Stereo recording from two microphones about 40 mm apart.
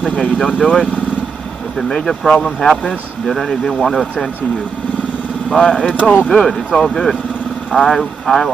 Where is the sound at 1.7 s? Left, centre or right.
Centre.